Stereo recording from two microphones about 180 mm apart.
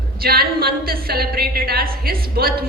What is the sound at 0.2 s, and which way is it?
A man's voice, 55° right (ahead or behind).